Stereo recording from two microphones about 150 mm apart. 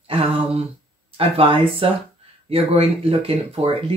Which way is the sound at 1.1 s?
40° right (ahead or behind).